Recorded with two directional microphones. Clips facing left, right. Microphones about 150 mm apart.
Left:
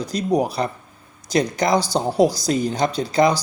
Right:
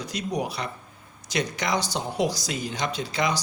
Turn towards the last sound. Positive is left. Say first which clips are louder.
# left 9 dB
turn(degrees=35)  # may be behind; listen again after turning